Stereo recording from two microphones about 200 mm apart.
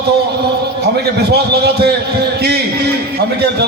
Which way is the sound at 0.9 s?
55° right (ahead or behind).